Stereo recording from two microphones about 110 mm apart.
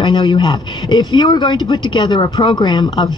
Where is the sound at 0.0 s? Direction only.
50° left (ahead or behind).